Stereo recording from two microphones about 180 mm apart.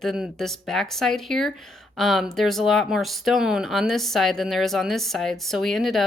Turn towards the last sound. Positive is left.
turn(degrees=0)  # may be behind; listen again after turning